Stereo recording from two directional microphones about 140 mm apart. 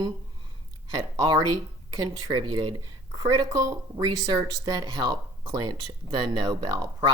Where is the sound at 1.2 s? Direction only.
35° right (ahead or behind).